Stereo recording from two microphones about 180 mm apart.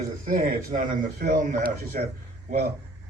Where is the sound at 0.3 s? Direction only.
50° right (ahead or behind).